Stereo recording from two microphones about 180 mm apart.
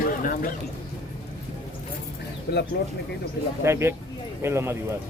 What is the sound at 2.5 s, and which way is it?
Speech, 60° left (ahead or behind).